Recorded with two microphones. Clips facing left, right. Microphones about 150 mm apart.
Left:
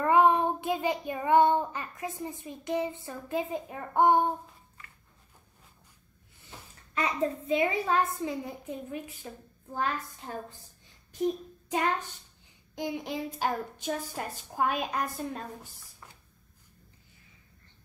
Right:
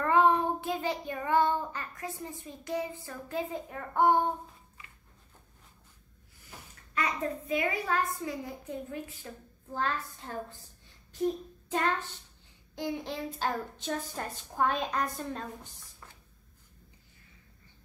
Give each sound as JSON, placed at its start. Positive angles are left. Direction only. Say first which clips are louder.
{"t": 0.0, "sound": "child singing", "louder": "left 2 dB", "side_deg": 15}
{"t": 6.4, "sound": "a child's voice", "louder": "left 1 dB", "side_deg": 25}
{"t": 11.1, "sound": "child singing", "louder": "left 1 dB", "side_deg": 15}
{"t": 12.7, "sound": "a child's voice", "louder": "left 1 dB", "side_deg": 15}